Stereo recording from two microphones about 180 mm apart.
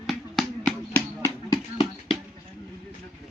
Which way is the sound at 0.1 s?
5° left (ahead or behind).